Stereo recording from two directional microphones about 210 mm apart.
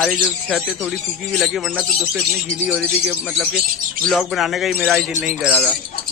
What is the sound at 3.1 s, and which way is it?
Speech, centre (ahead or behind).